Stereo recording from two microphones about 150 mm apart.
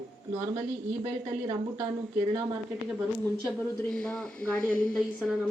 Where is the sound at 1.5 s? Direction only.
30° right (ahead or behind).